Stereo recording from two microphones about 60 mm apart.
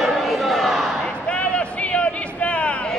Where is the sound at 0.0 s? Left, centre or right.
Centre.